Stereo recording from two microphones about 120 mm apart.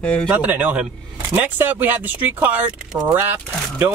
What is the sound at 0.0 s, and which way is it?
Speech, 10° left (ahead or behind).